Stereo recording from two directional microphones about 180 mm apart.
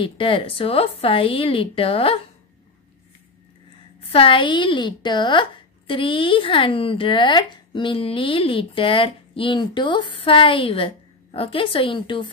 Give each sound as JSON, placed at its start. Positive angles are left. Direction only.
{"t": 0.0, "sound": "a woman's voice", "side_deg": 30}
{"t": 4.1, "sound": "speech", "side_deg": 30}